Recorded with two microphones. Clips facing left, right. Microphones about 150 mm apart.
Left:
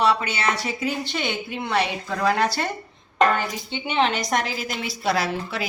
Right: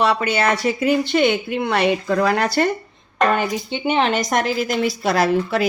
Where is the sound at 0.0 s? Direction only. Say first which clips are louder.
Right 4 dB; 55° right (ahead or behind).